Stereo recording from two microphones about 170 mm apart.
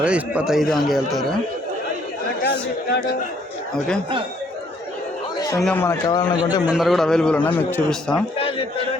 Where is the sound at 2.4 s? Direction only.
75° left (ahead or behind).